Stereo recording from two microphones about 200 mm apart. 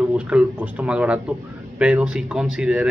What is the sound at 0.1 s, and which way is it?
Speech, 5° right (ahead or behind).